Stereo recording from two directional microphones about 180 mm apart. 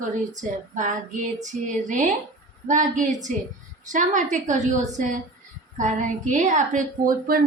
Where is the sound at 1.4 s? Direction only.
45° right (ahead or behind).